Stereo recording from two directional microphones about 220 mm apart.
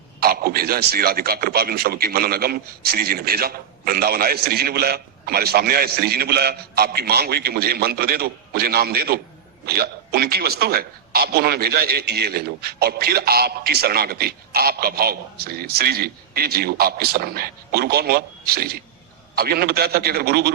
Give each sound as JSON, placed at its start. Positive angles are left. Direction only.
{"t": 0.2, "sound": "a man's voice", "side_deg": -45}